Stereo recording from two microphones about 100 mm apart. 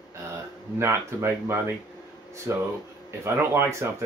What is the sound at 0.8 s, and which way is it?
Speech, 25° right (ahead or behind).